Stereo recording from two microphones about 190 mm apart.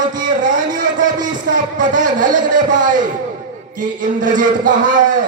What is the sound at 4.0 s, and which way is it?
Speech, 45° right (ahead or behind).